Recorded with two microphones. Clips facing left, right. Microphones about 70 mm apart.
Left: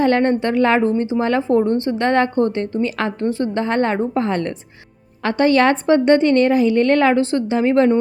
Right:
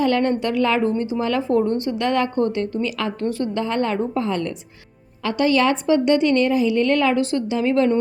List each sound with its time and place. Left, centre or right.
0.0 s speech: left